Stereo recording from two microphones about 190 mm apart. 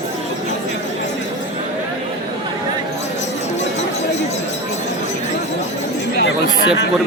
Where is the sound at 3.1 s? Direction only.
35° left (ahead or behind).